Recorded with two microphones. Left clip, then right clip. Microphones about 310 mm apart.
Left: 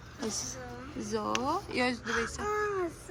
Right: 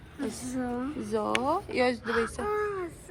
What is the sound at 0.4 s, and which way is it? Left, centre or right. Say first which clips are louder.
Speech: right 9 dB; centre.